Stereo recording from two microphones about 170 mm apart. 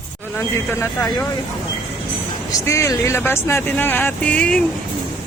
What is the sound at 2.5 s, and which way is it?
Speech, 15° left (ahead or behind).